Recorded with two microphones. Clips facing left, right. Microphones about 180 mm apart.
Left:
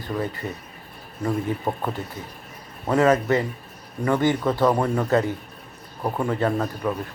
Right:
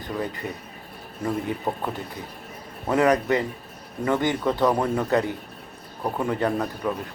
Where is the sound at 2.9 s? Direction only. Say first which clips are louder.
Left 1 dB; 20° right (ahead or behind).